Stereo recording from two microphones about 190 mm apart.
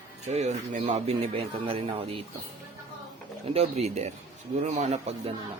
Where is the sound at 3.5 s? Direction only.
35° right (ahead or behind).